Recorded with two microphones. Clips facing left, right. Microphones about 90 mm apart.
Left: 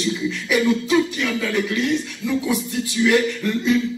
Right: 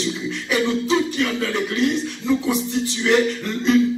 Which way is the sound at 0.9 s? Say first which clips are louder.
Left 1 dB; 35° right (ahead or behind).